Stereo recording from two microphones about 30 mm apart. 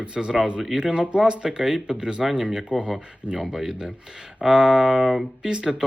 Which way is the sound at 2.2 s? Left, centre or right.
Centre.